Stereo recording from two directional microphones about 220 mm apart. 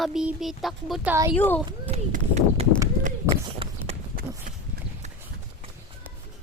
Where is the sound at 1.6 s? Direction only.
30° right (ahead or behind).